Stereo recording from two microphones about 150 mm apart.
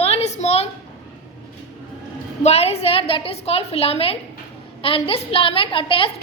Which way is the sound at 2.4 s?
45° left (ahead or behind).